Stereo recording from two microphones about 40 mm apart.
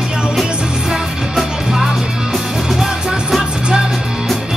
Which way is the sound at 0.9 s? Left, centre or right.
Centre.